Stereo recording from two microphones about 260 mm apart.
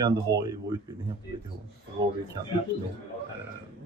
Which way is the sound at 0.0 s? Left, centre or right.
Centre.